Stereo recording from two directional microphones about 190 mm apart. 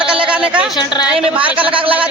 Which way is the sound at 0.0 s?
5° right (ahead or behind).